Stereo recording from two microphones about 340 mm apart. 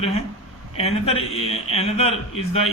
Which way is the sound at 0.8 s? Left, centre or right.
Centre.